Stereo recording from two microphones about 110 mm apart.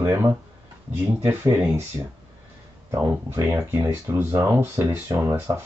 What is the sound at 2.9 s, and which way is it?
Speech, 25° right (ahead or behind).